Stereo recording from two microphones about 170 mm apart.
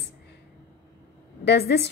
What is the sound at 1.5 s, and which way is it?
Speech, 75° left (ahead or behind).